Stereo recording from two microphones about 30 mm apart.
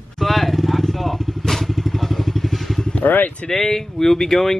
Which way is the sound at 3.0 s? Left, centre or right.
Left.